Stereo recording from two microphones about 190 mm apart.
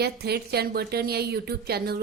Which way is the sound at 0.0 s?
60° right (ahead or behind).